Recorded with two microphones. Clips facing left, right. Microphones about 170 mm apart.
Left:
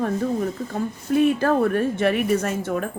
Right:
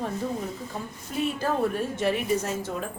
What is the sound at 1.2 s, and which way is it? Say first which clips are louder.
A woman's voice: left 8 dB; 60° left (ahead or behind).